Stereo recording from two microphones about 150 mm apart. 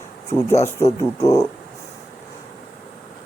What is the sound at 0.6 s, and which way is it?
Speech, 20° left (ahead or behind).